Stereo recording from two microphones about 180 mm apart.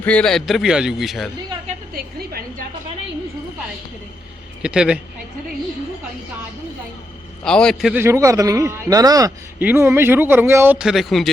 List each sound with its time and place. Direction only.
0.0 s a man's voice: 5° left (ahead or behind)
2.0 s a sound: 55° right (ahead or behind)
4.6 s a man's voice: 5° right (ahead or behind)
7.4 s a man's voice: 5° left (ahead or behind)
7.9 s a man's voice: 15° right (ahead or behind)